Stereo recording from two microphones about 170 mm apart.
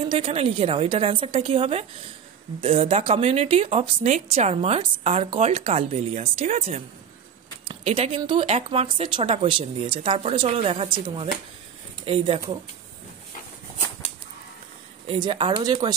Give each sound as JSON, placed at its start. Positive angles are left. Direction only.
{"t": 0.1, "sound": "speech", "side_deg": -35}
{"t": 12.1, "sound": "speech", "side_deg": -35}
{"t": 15.0, "sound": "speech", "side_deg": -30}